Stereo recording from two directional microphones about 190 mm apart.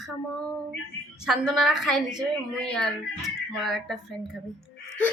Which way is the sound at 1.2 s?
5° right (ahead or behind).